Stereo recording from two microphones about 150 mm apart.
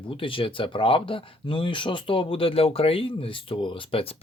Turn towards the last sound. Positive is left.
turn(degrees=35)  # may be behind; listen again after turning